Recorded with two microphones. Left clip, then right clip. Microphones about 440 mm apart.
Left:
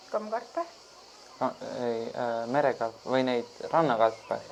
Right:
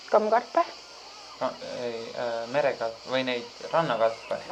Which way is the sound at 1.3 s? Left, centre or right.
Left.